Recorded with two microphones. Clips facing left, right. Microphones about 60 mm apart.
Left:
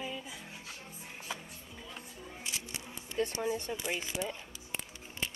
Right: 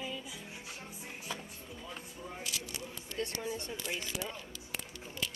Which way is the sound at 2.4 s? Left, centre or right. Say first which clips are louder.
Left 1 dB; left.